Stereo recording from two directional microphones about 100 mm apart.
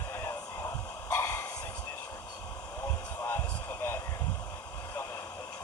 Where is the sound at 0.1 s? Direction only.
25° left (ahead or behind).